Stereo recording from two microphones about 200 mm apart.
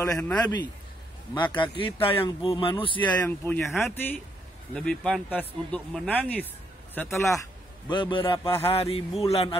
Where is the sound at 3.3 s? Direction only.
10° left (ahead or behind).